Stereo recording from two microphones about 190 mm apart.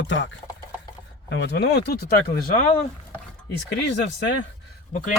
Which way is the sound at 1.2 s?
65° left (ahead or behind).